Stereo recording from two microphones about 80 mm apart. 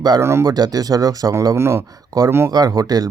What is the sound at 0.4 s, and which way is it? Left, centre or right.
Speech, right.